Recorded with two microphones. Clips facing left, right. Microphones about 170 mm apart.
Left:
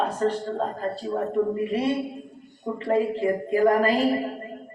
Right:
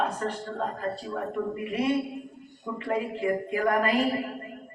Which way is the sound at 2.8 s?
30° left (ahead or behind).